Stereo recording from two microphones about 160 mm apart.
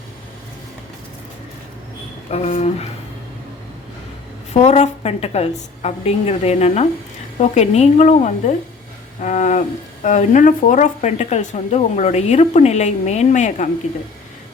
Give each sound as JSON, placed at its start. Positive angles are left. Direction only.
{"t": 2.3, "sound": "speech", "side_deg": 45}
{"t": 4.6, "sound": "a woman's voice", "side_deg": 45}